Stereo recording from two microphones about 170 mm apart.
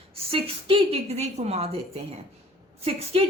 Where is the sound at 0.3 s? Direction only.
35° right (ahead or behind).